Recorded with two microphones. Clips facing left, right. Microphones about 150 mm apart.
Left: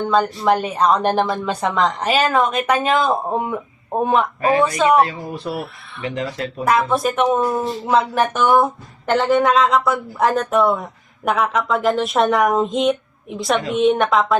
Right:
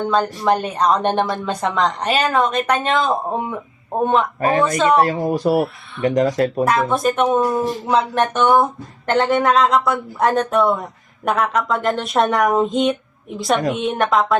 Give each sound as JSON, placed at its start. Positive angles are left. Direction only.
{"t": 0.0, "sound": "a woman's voice", "side_deg": 0}
{"t": 4.4, "sound": "speech", "side_deg": -45}
{"t": 6.9, "sound": "a woman's voice", "side_deg": 0}